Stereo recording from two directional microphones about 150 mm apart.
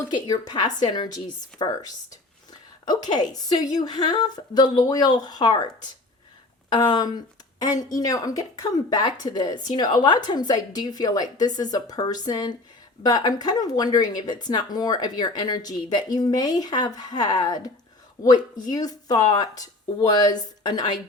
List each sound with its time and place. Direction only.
0.0 s speech: 25° left (ahead or behind)
0.6 s a woman's voice: 55° left (ahead or behind)
1.5 s speech: 30° left (ahead or behind)
6.7 s speech: 30° left (ahead or behind)